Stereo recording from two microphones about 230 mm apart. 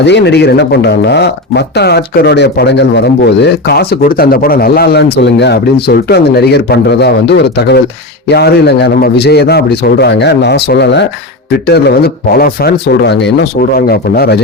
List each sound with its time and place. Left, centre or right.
0.0 s speech: left